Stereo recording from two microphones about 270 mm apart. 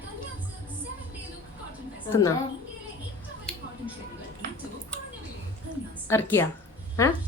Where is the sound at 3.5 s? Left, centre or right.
Centre.